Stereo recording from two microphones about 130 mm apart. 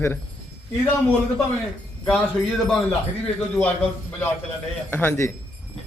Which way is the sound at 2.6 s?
5° left (ahead or behind).